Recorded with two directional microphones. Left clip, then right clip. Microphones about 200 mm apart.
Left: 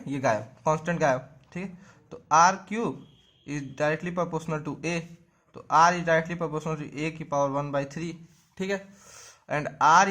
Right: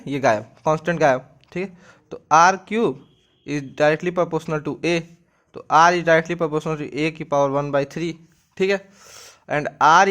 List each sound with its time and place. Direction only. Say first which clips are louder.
0.0 s speech: right 7 dB; 35° right (ahead or behind)